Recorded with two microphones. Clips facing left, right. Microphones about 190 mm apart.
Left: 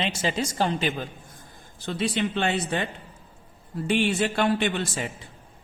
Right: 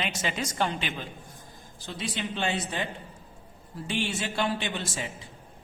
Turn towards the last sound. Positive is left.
turn(degrees=60)  # may be behind; listen again after turning